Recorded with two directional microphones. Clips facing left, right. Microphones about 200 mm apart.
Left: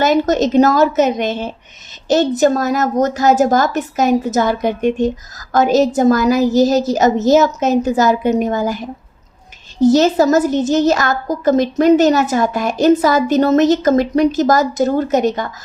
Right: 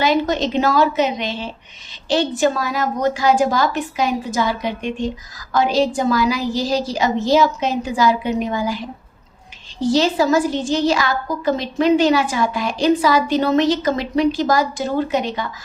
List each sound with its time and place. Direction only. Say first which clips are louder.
0.0 s a woman's voice: left 4 dB; 45° left (ahead or behind)